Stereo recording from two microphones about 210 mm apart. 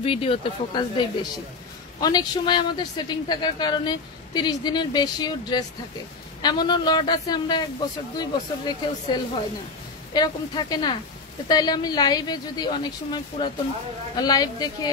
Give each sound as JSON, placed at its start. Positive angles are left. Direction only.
{"t": 0.0, "sound": "speech", "side_deg": 25}